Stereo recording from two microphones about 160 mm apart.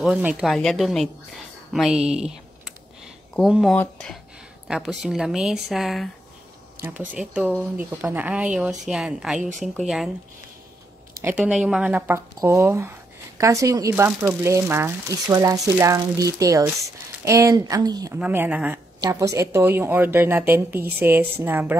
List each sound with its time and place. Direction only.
0.0 s speech: 5° right (ahead or behind)
3.7 s speech: 10° left (ahead or behind)
4.6 s speech: 5° right (ahead or behind)
7.2 s a woman's voice: 5° right (ahead or behind)
11.2 s a woman's voice: 5° right (ahead or behind); by 18.2 s 25° right (ahead or behind)
18.2 s a woman's voice: 10° right (ahead or behind)
18.9 s a woman's voice: 20° right (ahead or behind)